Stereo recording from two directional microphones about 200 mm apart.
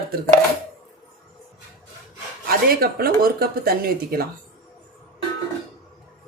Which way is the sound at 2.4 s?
50° right (ahead or behind).